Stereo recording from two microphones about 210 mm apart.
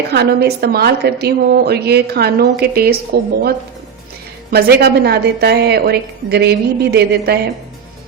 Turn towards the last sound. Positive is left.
turn(degrees=-50)  # may be behind; listen again after turning